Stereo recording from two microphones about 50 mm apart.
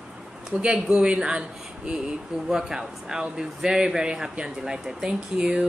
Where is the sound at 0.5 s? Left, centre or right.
Right.